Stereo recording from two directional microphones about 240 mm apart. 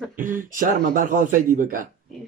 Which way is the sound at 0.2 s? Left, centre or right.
Right.